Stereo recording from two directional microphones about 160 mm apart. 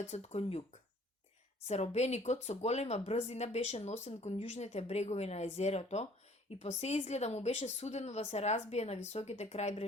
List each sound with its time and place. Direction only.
0.0 s speech: 40° left (ahead or behind)
1.6 s speech: 45° left (ahead or behind)